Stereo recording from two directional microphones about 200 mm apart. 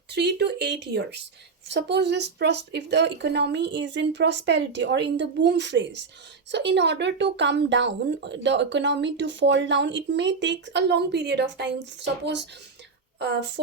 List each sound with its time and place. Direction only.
0.1 s speech: 55° right (ahead or behind)